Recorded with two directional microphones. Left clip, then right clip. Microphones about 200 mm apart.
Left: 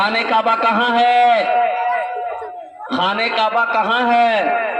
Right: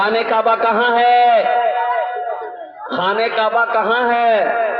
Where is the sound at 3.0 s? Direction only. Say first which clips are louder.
Right 1 dB; 40° right (ahead or behind).